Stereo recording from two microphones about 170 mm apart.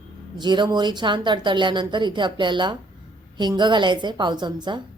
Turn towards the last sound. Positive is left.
turn(degrees=-25)  # may be behind; listen again after turning